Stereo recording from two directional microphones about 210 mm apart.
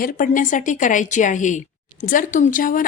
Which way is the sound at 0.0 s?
40° left (ahead or behind).